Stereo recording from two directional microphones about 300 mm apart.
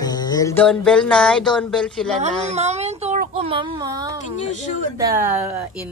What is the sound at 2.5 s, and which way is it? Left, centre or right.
Speech, right.